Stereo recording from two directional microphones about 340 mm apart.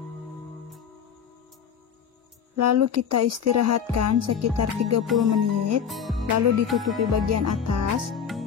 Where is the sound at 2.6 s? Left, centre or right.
Right.